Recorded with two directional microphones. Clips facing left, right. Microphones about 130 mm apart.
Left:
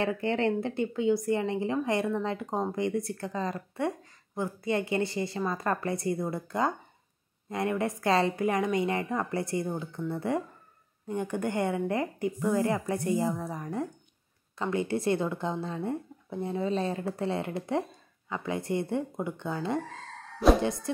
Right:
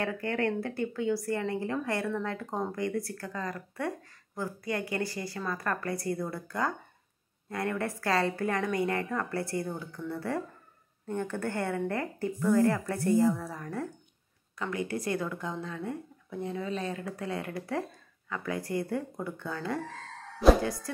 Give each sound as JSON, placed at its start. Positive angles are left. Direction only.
{"t": 0.0, "sound": "a woman's voice", "side_deg": 25}